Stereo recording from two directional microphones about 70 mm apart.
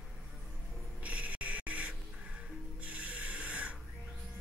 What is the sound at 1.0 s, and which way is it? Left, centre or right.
Music, right.